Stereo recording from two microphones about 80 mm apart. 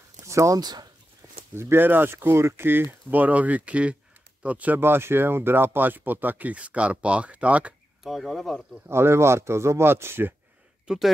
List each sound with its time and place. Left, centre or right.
0.3 s speech: right
0.6 s speech: right
1.5 s speech: right
8.0 s speech: centre
8.8 s speech: right
10.9 s speech: centre